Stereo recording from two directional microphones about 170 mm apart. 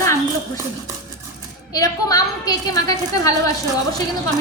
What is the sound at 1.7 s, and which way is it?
A woman's voice, 20° left (ahead or behind).